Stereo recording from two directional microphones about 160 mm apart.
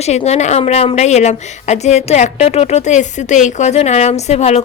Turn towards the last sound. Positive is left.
turn(degrees=40)  # may be behind; listen again after turning